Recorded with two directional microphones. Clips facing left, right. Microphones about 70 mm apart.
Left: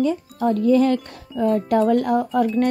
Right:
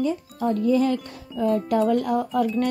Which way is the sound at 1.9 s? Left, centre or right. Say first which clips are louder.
Left 3 dB; left.